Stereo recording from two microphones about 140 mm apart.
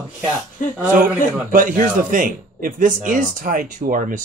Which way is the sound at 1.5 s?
70° right (ahead or behind).